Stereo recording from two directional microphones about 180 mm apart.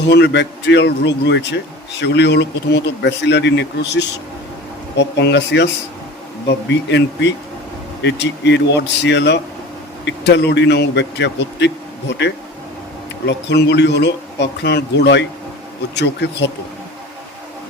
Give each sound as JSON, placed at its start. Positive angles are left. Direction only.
{"t": 0.1, "sound": "a man's voice", "side_deg": 70}